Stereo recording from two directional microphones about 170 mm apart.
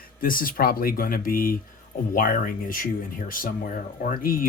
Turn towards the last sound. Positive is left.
turn(degrees=55)  # may be behind; listen again after turning